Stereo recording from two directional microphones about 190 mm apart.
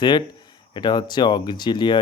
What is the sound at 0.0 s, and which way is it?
Speech, 25° left (ahead or behind).